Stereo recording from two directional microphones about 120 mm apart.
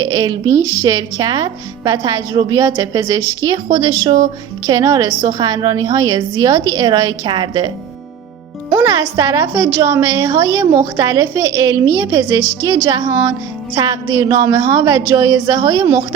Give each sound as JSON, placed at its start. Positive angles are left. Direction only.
{"t": 0.0, "sound": "a woman's voice", "side_deg": -30}
{"t": 8.7, "sound": "a woman's voice", "side_deg": -30}